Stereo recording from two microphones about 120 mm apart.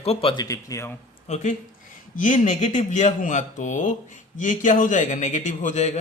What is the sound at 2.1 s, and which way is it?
Speech, 90° left.